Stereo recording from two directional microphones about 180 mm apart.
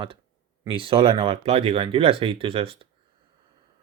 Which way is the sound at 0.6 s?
30° right (ahead or behind).